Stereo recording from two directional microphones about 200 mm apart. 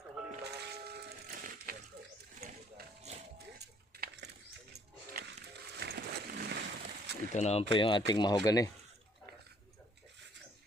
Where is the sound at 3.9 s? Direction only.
50° right (ahead or behind).